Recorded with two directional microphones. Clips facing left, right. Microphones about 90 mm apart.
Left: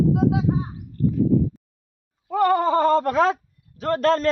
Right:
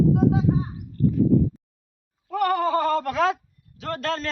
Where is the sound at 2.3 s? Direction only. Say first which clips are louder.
Left 3 dB; 25° left (ahead or behind).